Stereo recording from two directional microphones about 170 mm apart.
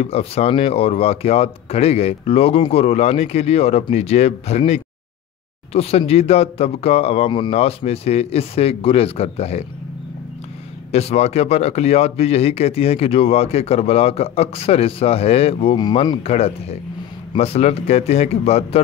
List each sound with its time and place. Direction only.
0.0 s speech: 35° left (ahead or behind)
10.9 s speech: 40° left (ahead or behind)